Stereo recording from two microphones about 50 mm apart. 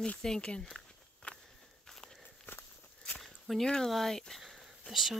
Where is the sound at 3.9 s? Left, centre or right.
Centre.